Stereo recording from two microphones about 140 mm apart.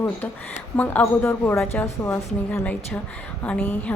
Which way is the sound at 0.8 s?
15° left (ahead or behind).